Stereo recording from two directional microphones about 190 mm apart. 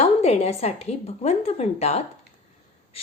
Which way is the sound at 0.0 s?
35° left (ahead or behind).